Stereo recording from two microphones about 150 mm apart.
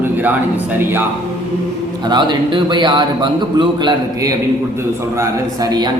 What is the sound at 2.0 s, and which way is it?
A man's voice, 30° right (ahead or behind).